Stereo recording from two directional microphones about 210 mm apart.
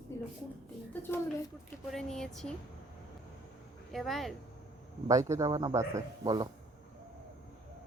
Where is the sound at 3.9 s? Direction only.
Centre (ahead or behind).